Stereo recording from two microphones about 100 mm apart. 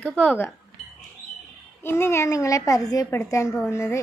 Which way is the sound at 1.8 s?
25° left (ahead or behind).